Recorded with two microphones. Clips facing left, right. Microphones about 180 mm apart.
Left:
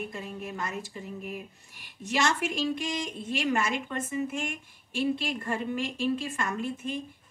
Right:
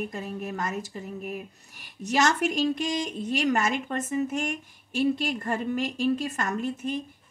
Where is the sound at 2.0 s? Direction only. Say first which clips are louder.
Right 4 dB; 40° right (ahead or behind).